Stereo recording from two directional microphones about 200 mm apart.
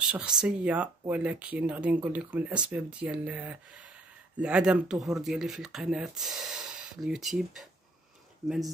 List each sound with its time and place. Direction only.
0.1 s speech: 5° right (ahead or behind)